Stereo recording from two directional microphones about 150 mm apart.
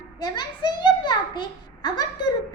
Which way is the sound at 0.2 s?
30° left (ahead or behind).